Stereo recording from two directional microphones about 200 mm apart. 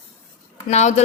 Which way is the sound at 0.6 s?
35° left (ahead or behind).